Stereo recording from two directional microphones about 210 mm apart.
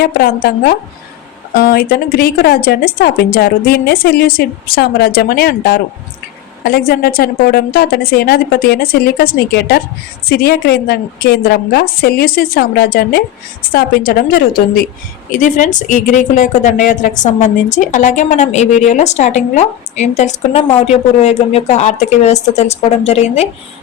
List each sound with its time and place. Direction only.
0.0 s a woman's voice: 45° left (ahead or behind); by 23.5 s 30° left (ahead or behind)